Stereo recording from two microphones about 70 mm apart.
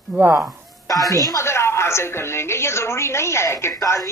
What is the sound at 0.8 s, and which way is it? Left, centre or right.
A woman's voice, left.